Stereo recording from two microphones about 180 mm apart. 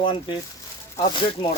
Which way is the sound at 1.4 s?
25° left (ahead or behind).